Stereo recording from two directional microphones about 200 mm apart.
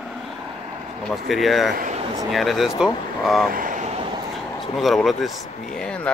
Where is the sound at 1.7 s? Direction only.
40° right (ahead or behind).